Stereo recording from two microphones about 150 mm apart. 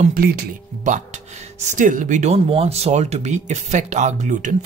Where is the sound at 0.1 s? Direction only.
80° right.